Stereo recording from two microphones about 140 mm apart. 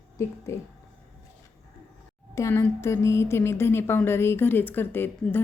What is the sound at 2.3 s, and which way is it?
Speech, 20° left (ahead or behind).